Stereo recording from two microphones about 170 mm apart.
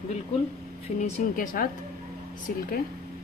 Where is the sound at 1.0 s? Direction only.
55° left (ahead or behind).